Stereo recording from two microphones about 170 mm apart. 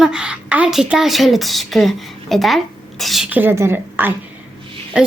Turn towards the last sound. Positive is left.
turn(degrees=-5)  # may be behind; listen again after turning